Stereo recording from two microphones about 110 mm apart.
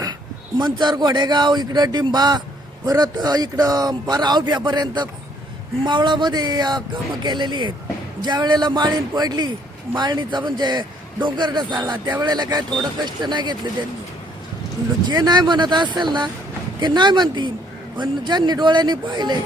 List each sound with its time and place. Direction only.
0.6 s a man's voice: 40° right (ahead or behind)
15.0 s a man's voice: 40° right (ahead or behind)